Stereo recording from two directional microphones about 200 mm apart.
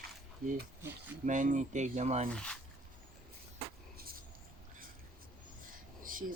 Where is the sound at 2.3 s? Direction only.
5° left (ahead or behind).